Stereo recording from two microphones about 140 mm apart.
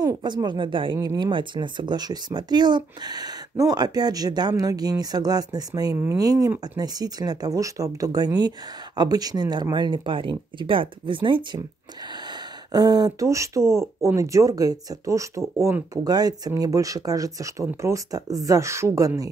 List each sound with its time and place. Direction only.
0.0 s speech: 30° right (ahead or behind)